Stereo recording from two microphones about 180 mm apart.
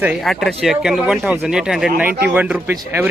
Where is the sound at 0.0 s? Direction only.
Centre (ahead or behind).